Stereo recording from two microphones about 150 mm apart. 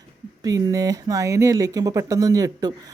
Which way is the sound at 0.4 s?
25° right (ahead or behind).